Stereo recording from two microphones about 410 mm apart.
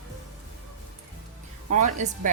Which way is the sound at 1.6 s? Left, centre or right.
Centre.